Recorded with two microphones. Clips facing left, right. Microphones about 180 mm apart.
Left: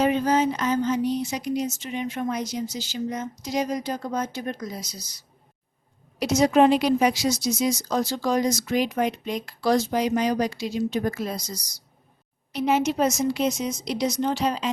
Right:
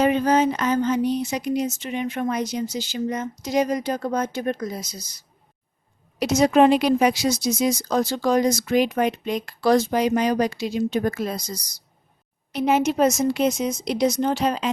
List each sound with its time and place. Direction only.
0.0 s a woman's voice: 60° right (ahead or behind)
6.1 s a woman's voice: 60° right (ahead or behind)
12.5 s a woman's voice: 50° right (ahead or behind)